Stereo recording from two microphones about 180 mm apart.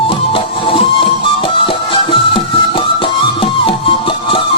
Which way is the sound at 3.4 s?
30° left (ahead or behind).